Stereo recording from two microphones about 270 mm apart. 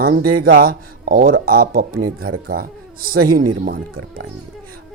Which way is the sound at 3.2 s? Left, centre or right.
Right.